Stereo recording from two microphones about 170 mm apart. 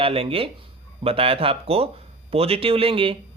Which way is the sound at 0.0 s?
35° right (ahead or behind).